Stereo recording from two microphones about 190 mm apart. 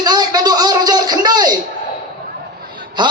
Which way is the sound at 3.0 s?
25° right (ahead or behind).